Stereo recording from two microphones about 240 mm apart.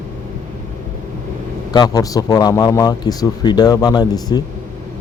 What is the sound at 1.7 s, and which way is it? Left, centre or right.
A man's voice, centre.